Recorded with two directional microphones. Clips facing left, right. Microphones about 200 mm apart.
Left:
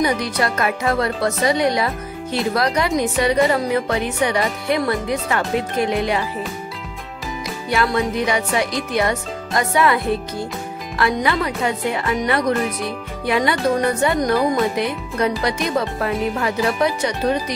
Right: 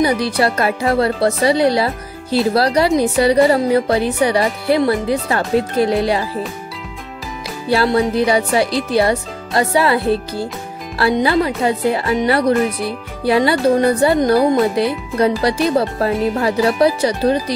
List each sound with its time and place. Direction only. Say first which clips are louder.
0.0 s speech: right 4 dB; 30° right (ahead or behind)
7.7 s speech: right 5 dB; 30° right (ahead or behind)